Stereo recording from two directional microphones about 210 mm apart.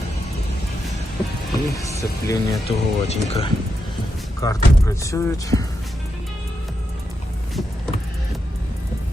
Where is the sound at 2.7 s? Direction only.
30° left (ahead or behind).